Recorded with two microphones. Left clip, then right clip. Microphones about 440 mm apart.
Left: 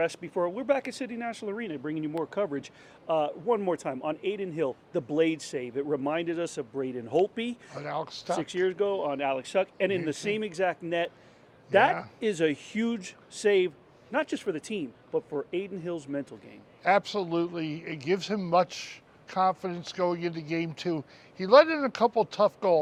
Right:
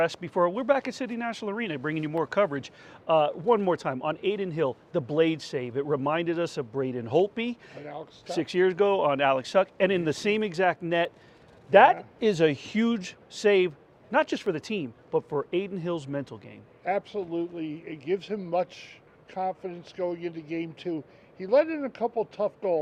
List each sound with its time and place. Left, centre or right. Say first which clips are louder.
0.0 s speech: right 4 dB; right
3.1 s speech: right 4 dB; right
7.8 s speech: left 6 dB; left
8.4 s speech: right 6 dB; right
16.8 s speech: left 4 dB; left